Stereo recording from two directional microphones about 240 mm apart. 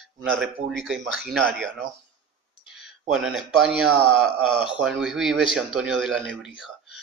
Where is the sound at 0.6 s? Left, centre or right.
Right.